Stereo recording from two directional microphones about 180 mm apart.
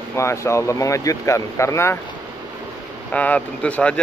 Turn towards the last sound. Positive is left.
turn(degrees=5)  # may be behind; listen again after turning